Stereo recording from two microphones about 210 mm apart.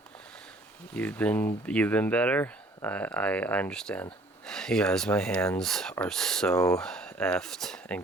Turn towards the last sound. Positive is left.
turn(degrees=5)  # may be behind; listen again after turning